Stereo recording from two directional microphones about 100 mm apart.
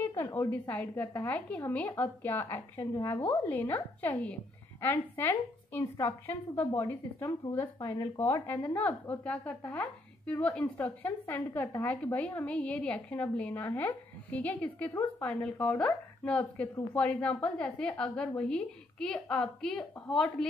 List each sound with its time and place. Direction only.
0.0 s a sound: 25° left (ahead or behind)
0.5 s a woman's voice: 20° left (ahead or behind); by 8.1 s 35° left (ahead or behind)
8.2 s a woman's voice: 20° left (ahead or behind); by 20.4 s 5° left (ahead or behind)